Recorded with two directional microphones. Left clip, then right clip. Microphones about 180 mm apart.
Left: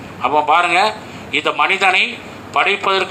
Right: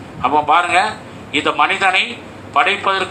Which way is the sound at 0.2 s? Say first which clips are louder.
Even; 55° left (ahead or behind).